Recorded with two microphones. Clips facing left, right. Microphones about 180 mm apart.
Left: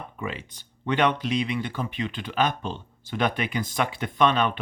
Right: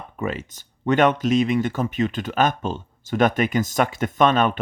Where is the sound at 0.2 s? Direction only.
45° right (ahead or behind).